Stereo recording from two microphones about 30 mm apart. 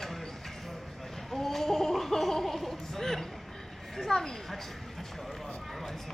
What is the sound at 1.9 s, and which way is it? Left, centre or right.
Chuckle, centre.